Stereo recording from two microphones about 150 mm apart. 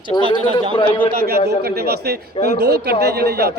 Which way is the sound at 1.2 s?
90° right.